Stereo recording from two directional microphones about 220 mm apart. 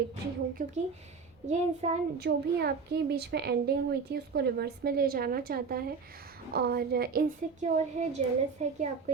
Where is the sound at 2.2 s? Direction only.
45° right (ahead or behind).